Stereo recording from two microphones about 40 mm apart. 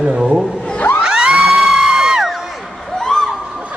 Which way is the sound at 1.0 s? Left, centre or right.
Right.